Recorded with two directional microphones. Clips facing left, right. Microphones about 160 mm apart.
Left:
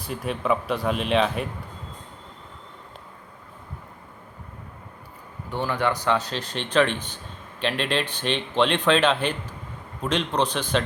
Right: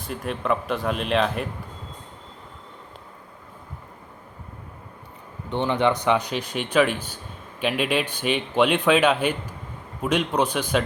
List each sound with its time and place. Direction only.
0.0 s speech: centre (ahead or behind)
5.5 s a man's voice: 20° right (ahead or behind)